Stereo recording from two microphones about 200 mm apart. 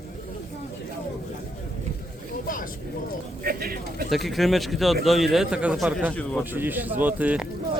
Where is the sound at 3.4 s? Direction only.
50° right (ahead or behind).